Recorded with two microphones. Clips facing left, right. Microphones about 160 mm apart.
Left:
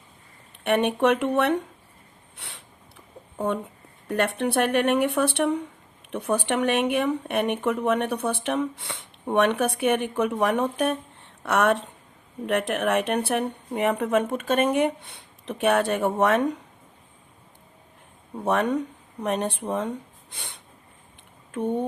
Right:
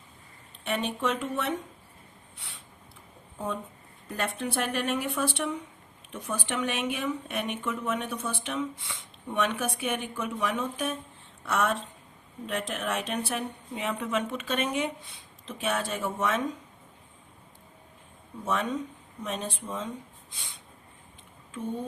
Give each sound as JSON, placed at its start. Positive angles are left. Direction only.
{"t": 0.6, "sound": "speech", "side_deg": 65}
{"t": 2.3, "sound": "a sound", "side_deg": 70}
{"t": 3.3, "sound": "speech", "side_deg": 65}
{"t": 18.3, "sound": "speech", "side_deg": 60}